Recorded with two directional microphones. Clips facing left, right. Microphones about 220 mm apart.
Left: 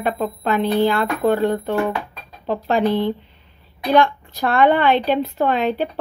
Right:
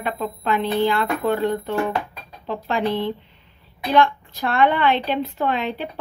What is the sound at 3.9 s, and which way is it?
A woman's voice, 45° left (ahead or behind).